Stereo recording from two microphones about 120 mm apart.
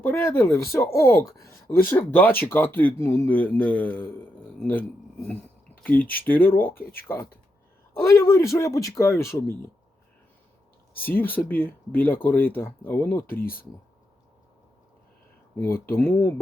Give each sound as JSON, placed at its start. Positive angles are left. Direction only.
{"t": 0.0, "sound": "speech", "side_deg": 20}
{"t": 10.9, "sound": "speech", "side_deg": 15}
{"t": 15.6, "sound": "speech", "side_deg": 20}